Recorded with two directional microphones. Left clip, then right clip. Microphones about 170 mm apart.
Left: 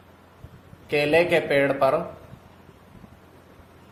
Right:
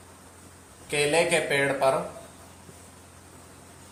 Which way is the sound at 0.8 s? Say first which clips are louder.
Left 3 dB; 60° left (ahead or behind).